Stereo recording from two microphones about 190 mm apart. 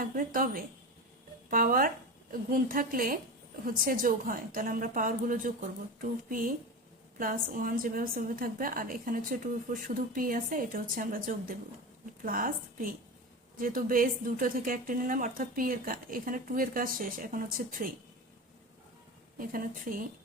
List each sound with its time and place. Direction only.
0.0 s a woman's voice: 45° right (ahead or behind)
19.4 s a woman's voice: 45° right (ahead or behind)